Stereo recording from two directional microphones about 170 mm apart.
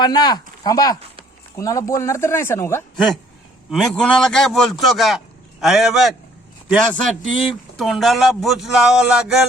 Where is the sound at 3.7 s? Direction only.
Centre (ahead or behind).